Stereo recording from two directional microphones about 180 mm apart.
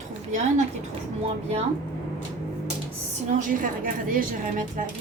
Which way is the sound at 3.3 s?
45° right (ahead or behind).